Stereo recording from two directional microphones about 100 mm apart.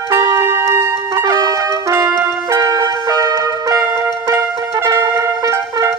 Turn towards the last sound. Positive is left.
turn(degrees=-35)  # may be behind; listen again after turning